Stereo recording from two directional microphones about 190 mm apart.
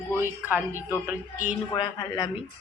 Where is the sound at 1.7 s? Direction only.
20° left (ahead or behind).